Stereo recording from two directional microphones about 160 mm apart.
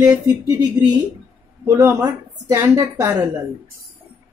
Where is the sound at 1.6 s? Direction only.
20° right (ahead or behind).